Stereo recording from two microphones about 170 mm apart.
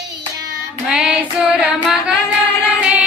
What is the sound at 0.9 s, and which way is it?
Child singing, 5° right (ahead or behind).